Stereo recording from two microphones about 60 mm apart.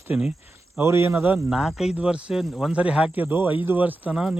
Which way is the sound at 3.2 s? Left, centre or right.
Right.